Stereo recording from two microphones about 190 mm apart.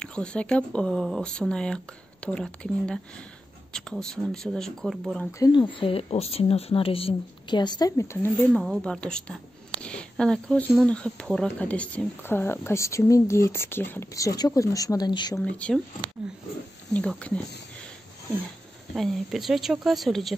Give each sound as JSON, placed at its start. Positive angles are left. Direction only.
{"t": 0.0, "sound": "speech", "side_deg": 5}
{"t": 5.4, "sound": "speech", "side_deg": 25}
{"t": 8.5, "sound": "speech", "side_deg": 0}
{"t": 15.5, "sound": "speech", "side_deg": 5}
{"t": 16.9, "sound": "speech", "side_deg": 5}
{"t": 18.9, "sound": "speech", "side_deg": 0}